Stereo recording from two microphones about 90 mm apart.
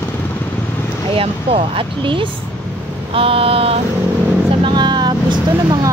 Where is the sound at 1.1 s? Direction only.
90° right; by 2.2 s 75° right (ahead or behind).